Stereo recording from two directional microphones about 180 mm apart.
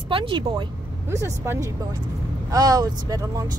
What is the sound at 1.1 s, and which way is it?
Speech, 15° right (ahead or behind).